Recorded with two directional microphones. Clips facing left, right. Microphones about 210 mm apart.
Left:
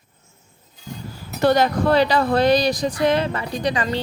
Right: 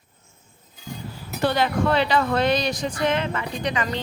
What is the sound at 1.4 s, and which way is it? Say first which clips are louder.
Speech: left 4 dB; 45° left (ahead or behind).